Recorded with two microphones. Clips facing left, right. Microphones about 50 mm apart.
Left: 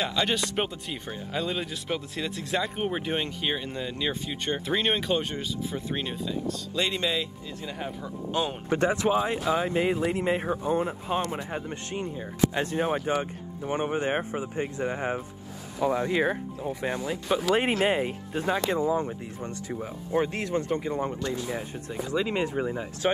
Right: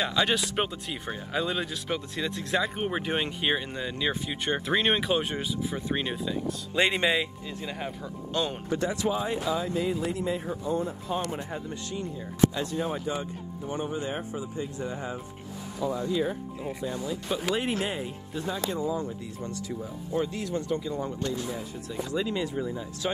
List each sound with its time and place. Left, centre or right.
0.0 s speech: centre
3.3 s speech: centre
3.5 s speech: centre
4.1 s speech: centre
5.7 s speech: centre
6.7 s speech: right
7.6 s speech: centre
8.3 s speech: centre
8.6 s speech: left
15.8 s speech: left
16.6 s speech: left